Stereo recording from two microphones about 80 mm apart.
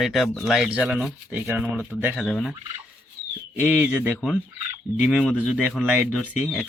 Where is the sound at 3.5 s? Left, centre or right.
Centre.